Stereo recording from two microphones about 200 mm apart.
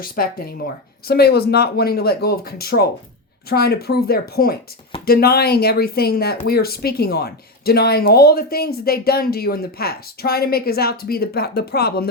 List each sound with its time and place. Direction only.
0.0 s speech: 45° left (ahead or behind)